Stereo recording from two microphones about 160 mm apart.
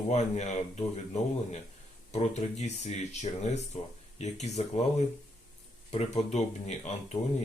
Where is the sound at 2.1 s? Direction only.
45° left (ahead or behind).